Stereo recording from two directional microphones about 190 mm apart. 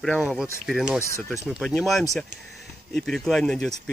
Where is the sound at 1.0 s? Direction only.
15° left (ahead or behind).